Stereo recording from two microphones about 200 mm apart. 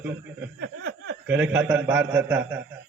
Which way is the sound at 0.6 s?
65° right (ahead or behind).